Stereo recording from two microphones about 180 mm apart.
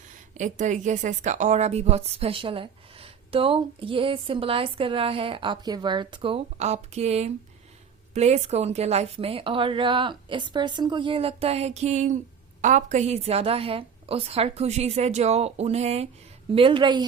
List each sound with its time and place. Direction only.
0.3 s a woman's voice: 45° right (ahead or behind); by 17.1 s 25° right (ahead or behind)